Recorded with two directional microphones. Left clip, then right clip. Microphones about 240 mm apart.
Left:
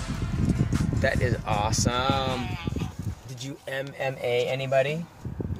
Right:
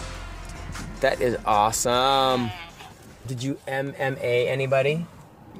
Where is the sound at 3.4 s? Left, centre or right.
Right.